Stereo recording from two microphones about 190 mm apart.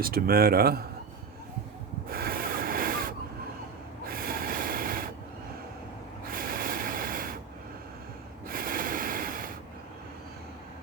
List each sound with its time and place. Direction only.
0.0 s speech: 50° right (ahead or behind)
2.0 s snort: 50° right (ahead or behind)
6.3 s a sound: 50° right (ahead or behind)
8.4 s snort: 50° right (ahead or behind)